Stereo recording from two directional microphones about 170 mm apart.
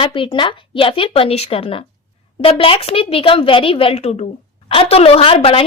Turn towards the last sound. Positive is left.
turn(degrees=35)  # may be behind; listen again after turning